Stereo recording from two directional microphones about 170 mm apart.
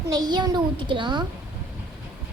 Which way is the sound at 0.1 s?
25° right (ahead or behind).